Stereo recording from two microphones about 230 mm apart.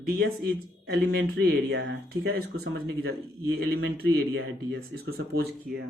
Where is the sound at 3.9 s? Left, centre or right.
Right.